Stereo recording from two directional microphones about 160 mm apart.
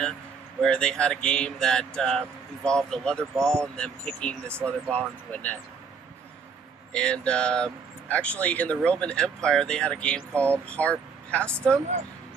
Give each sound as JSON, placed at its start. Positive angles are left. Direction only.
{"t": 0.6, "sound": "speech", "side_deg": 5}
{"t": 6.9, "sound": "speech", "side_deg": 5}